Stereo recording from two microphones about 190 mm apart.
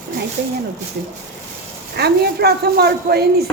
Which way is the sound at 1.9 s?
55° right (ahead or behind).